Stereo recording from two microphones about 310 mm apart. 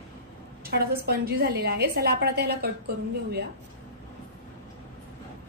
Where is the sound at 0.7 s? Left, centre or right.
Right.